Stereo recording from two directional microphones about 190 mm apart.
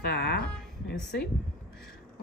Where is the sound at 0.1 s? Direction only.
60° left (ahead or behind).